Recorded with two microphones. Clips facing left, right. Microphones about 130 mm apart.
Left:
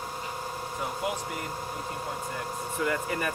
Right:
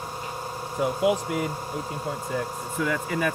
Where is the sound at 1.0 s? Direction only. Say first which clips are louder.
Right 11 dB; 90° right.